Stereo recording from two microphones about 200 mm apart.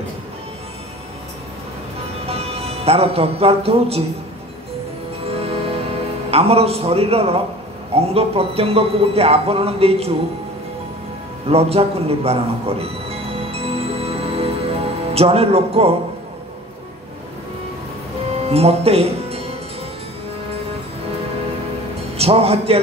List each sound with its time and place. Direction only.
2.2 s speech: 30° right (ahead or behind)
5.3 s music: 30° right (ahead or behind)
6.3 s speech: 30° right (ahead or behind)
11.4 s music: 30° right (ahead or behind)
18.5 s speech: 30° right (ahead or behind)
22.1 s a man's voice: 30° right (ahead or behind)